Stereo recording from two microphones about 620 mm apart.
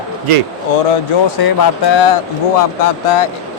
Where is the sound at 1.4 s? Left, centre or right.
Left.